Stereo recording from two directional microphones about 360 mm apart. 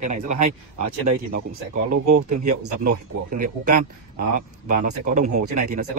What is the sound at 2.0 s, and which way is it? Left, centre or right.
Speech, right.